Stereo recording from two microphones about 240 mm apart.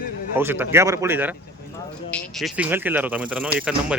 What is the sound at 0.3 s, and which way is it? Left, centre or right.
Speech, centre.